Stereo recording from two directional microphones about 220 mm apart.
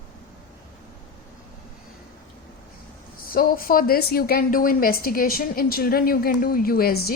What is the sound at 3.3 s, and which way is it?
A woman's voice, 40° left (ahead or behind).